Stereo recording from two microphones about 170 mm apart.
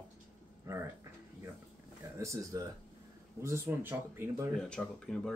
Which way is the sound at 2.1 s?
15° right (ahead or behind).